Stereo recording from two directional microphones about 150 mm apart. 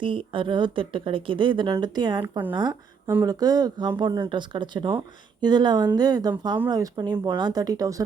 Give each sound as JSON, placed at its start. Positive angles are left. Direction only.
{"t": 0.0, "sound": "speech", "side_deg": -35}